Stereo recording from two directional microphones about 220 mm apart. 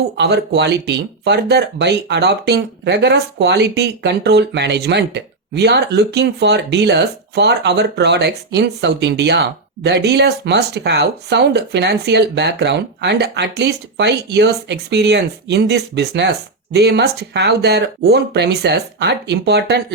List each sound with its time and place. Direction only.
0.2 s speech: 50° right (ahead or behind)